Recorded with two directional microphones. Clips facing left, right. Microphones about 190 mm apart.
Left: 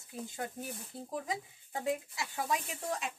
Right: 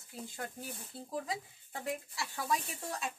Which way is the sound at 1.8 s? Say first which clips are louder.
Left 4 dB; 20° left (ahead or behind).